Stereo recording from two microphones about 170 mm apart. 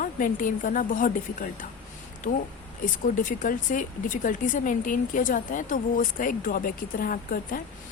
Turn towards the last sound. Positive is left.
turn(degrees=55)  # may be behind; listen again after turning